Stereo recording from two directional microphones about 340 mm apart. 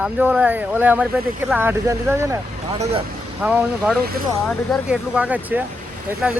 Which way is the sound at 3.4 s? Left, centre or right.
Centre.